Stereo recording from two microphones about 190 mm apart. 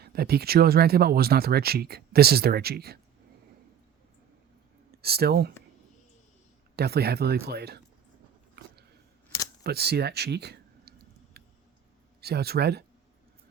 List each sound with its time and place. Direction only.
0.0 s speech: 55° right (ahead or behind)
4.9 s speech: 55° right (ahead or behind)
6.7 s speech: 55° right (ahead or behind)
9.6 s a sound: 55° right (ahead or behind)
12.2 s speech: 55° right (ahead or behind)